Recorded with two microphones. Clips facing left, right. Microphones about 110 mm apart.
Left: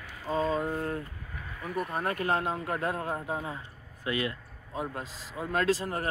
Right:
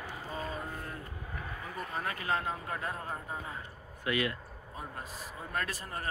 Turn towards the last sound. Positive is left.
turn(degrees=90)